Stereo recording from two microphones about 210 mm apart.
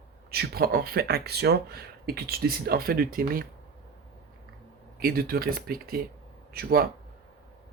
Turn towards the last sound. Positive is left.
turn(degrees=-45)  # may be behind; listen again after turning